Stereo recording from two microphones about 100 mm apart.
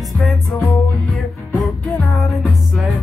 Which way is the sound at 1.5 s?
15° left (ahead or behind).